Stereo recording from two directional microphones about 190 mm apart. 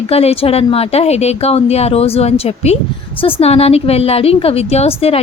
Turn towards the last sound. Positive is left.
turn(degrees=30)  # may be behind; listen again after turning